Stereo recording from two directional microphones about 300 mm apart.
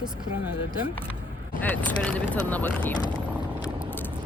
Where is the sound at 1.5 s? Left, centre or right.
Centre.